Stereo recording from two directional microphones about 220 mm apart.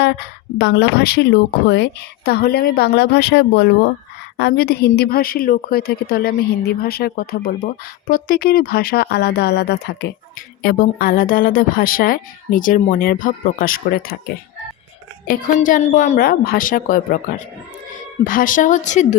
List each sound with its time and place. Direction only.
0.6 s a woman's voice: 50° left (ahead or behind)
15.3 s speech: 35° left (ahead or behind)